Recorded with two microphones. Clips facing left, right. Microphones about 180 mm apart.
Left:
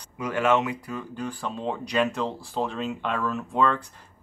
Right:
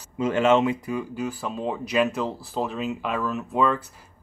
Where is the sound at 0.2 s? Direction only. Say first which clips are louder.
Right 4 dB; 25° right (ahead or behind).